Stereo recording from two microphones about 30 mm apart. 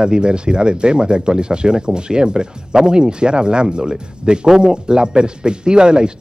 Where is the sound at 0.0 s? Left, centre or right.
Right.